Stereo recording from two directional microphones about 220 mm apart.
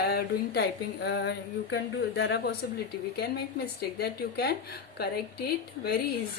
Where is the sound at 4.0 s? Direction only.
45° left (ahead or behind).